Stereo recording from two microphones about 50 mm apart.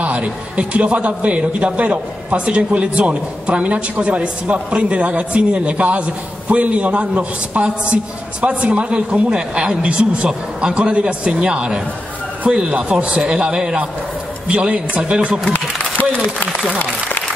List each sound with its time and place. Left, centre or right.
0.0 s a man's voice: right
8.7 s a man's voice: right